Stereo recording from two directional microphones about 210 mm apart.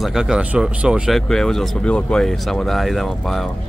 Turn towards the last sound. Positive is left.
turn(degrees=0)  # may be behind; listen again after turning